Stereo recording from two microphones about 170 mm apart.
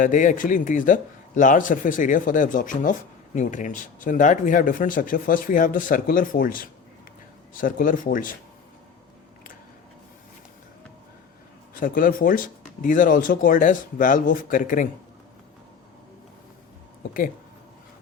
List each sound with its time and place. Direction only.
0.0 s speech: 50° left (ahead or behind)
11.8 s speech: 55° left (ahead or behind)